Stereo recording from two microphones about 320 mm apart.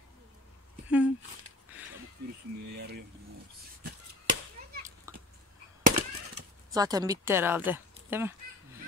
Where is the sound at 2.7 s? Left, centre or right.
Right.